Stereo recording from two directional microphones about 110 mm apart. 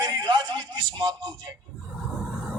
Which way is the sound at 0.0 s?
40° right (ahead or behind).